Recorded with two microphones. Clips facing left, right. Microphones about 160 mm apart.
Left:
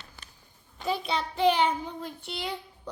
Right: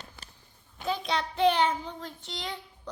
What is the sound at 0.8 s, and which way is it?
Child singing, 5° left (ahead or behind).